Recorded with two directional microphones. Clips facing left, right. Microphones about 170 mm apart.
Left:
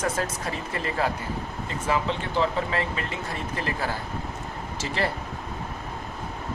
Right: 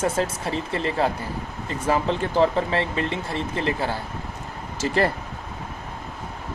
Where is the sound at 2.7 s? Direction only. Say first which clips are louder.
Right 4 dB; 30° right (ahead or behind).